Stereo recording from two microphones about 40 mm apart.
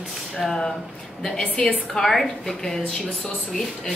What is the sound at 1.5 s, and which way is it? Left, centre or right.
Speech, left.